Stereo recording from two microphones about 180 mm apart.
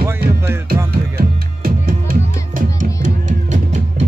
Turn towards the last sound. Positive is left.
turn(degrees=-45)  # may be behind; listen again after turning